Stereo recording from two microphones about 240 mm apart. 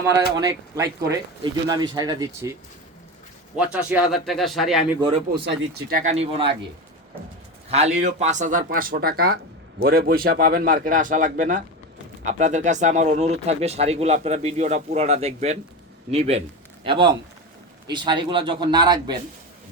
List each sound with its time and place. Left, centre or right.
0.3 s speech: centre
3.5 s speech: centre
5.5 s speech: right
7.7 s a man's voice: right